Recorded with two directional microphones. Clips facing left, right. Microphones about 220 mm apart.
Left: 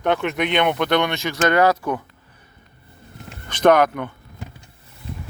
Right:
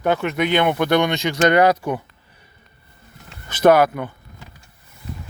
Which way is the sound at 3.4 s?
5° right (ahead or behind).